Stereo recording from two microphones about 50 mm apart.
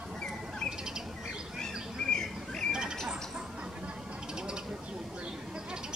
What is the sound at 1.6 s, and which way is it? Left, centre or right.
Bird, centre.